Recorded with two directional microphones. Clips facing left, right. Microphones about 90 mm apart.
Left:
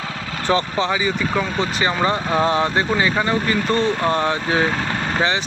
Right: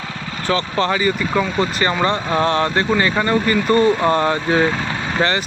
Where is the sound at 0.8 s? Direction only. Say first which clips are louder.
Right 2 dB; 5° left (ahead or behind).